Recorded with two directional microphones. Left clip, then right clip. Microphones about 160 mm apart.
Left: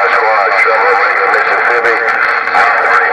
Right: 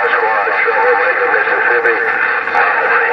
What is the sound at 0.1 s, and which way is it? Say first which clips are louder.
Radio: left 4 dB; 55° left (ahead or behind).